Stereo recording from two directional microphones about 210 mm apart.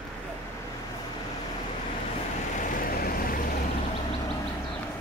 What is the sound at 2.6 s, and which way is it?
Vehicle, 40° left (ahead or behind).